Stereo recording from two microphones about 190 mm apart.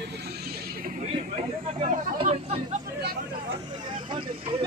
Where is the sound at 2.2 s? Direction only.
30° right (ahead or behind).